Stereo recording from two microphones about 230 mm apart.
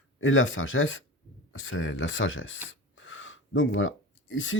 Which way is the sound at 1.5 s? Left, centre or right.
Left.